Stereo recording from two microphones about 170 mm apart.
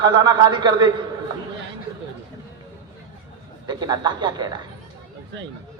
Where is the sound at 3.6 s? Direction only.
25° right (ahead or behind).